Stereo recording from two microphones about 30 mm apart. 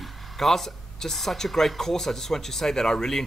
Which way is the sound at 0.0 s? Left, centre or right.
Centre.